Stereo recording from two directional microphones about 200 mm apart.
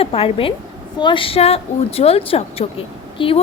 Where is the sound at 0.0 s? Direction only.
30° left (ahead or behind).